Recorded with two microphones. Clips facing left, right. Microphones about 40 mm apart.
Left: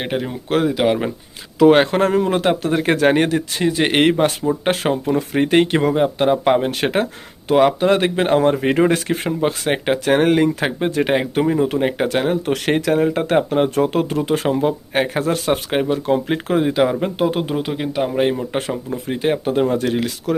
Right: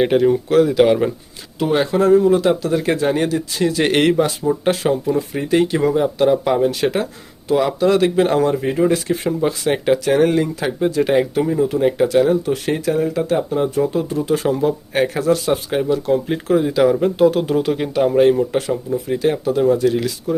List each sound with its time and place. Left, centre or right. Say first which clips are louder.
0.0 s speech: right 9 dB; centre
1.7 s speech: right 1 dB; left
3.6 s speech: even; left
4.6 s speech: right 2 dB; left
5.9 s speech: right 1 dB; left
8.6 s speech: left 1 dB; left
10.0 s speech: left 1 dB; left
17.0 s speech: right 5 dB; left
17.5 s speech: right 4 dB; centre
18.5 s speech: right 3 dB; left
20.3 s speech: even; left